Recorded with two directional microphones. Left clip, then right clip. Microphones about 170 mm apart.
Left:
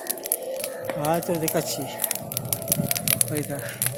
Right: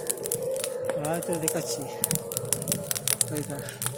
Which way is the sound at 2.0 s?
40° right (ahead or behind).